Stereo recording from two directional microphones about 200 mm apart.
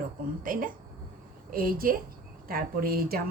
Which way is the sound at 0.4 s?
45° right (ahead or behind).